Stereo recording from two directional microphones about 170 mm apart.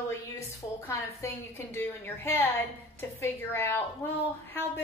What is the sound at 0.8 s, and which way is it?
A woman's voice, 15° left (ahead or behind).